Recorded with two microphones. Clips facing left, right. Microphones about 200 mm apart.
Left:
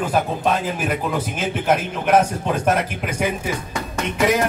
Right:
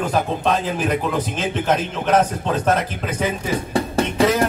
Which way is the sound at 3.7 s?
30° right (ahead or behind).